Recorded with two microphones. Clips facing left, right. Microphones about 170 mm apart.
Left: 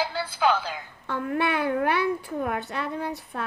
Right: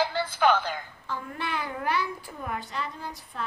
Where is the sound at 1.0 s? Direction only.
65° left (ahead or behind).